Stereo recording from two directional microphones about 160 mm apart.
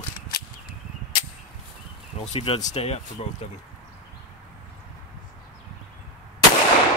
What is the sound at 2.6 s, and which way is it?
Speech, 40° left (ahead or behind).